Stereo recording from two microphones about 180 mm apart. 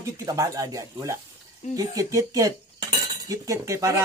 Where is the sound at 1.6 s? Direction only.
40° left (ahead or behind).